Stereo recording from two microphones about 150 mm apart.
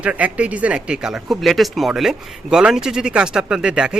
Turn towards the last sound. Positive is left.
turn(degrees=-5)  # may be behind; listen again after turning